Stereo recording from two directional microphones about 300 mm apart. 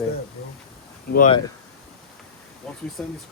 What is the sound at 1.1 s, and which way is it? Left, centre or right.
Speech, left.